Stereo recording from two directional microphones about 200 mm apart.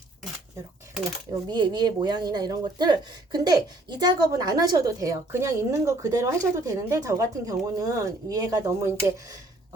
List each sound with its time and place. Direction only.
1.5 s speech: 20° right (ahead or behind)